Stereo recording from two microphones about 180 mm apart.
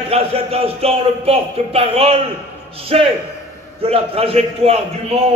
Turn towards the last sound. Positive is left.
turn(degrees=-35)  # may be behind; listen again after turning